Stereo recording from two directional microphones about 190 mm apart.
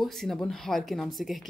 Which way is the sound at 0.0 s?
Centre (ahead or behind).